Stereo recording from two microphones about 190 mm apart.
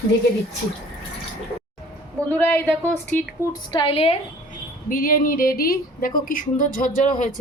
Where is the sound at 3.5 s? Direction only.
25° left (ahead or behind).